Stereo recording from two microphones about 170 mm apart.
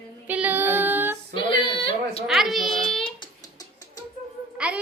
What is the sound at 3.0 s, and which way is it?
Music, 30° left (ahead or behind).